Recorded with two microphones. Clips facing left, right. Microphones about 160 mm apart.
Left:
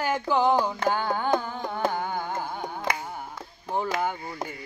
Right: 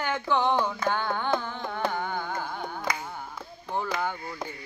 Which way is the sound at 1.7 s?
15° left (ahead or behind).